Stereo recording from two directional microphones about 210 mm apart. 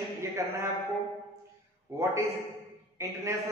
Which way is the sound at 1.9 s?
15° right (ahead or behind).